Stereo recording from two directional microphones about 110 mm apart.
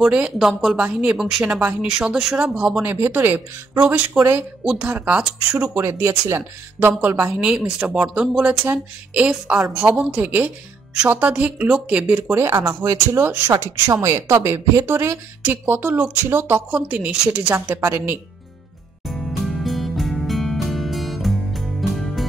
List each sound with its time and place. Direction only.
0.0 s a woman's voice: 5° right (ahead or behind)
5.8 s a woman's voice: 25° right (ahead or behind)
12.5 s a woman's voice: 35° right (ahead or behind); by 17.6 s 10° right (ahead or behind)
17.6 s a woman's voice: 25° right (ahead or behind)
19.0 s music: centre (ahead or behind)